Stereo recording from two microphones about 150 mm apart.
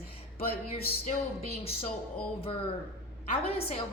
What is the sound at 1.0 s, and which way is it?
Speech, 50° left (ahead or behind).